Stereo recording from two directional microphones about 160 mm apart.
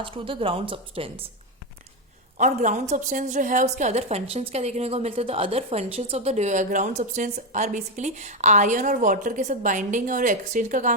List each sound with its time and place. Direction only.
0.0 s a woman's voice: 35° right (ahead or behind)
2.4 s a woman's voice: 50° right (ahead or behind)